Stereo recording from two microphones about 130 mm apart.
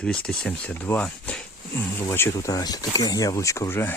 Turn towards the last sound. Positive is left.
turn(degrees=20)  # may be behind; listen again after turning